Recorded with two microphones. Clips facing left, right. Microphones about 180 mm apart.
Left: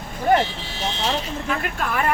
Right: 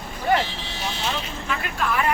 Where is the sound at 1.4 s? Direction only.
50° left (ahead or behind).